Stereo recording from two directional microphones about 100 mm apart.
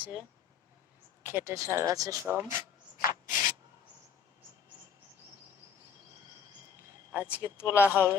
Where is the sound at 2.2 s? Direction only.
25° right (ahead or behind).